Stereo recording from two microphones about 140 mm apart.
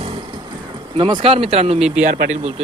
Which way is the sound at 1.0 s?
35° right (ahead or behind).